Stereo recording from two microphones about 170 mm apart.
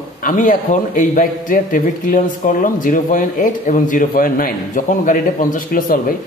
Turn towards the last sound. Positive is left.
turn(degrees=55)  # may be behind; listen again after turning